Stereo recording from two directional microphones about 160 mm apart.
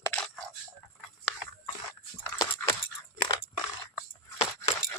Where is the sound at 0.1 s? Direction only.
5° left (ahead or behind).